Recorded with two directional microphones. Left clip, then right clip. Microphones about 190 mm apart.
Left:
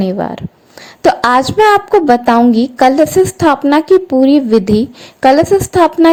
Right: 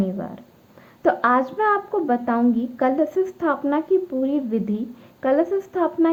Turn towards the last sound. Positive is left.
turn(degrees=40)  # may be behind; listen again after turning